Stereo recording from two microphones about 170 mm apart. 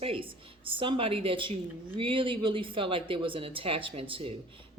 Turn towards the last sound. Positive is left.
turn(degrees=-30)  # may be behind; listen again after turning